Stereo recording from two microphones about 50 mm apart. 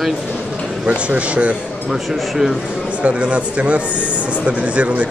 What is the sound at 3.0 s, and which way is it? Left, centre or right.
Speech, right.